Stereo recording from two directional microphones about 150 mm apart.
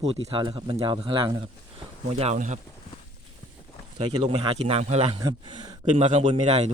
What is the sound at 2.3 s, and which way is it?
Speech, 55° right (ahead or behind).